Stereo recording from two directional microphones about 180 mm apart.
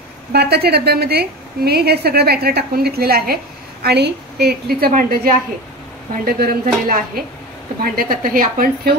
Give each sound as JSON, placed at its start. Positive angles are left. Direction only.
{"t": 0.3, "sound": "a woman's voice", "side_deg": -65}